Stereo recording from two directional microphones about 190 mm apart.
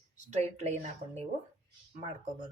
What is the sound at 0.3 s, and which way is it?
Speech, 35° right (ahead or behind).